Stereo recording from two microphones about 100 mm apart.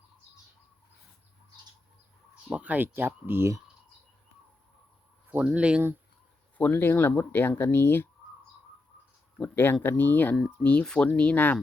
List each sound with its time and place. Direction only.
2.5 s speech: 15° right (ahead or behind)
5.3 s speech: 15° right (ahead or behind)
6.6 s speech: 20° left (ahead or behind)
9.4 s speech: 20° left (ahead or behind)